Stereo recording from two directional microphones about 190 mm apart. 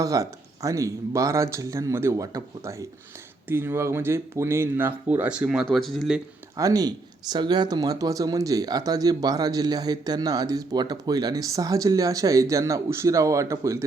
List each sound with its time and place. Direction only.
0.0 s speech: 15° right (ahead or behind); by 6.2 s centre (ahead or behind)
6.6 s speech: 20° right (ahead or behind)